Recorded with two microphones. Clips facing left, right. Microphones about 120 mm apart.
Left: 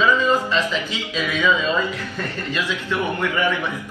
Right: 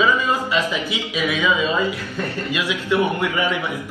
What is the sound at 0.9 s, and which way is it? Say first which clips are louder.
A man's voice: right 2 dB; 15° right (ahead or behind).